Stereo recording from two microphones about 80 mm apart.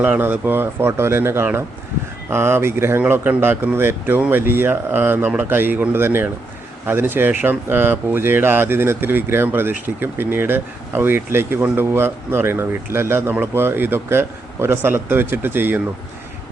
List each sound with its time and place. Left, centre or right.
0.0 s speech: right
11.6 s speech: centre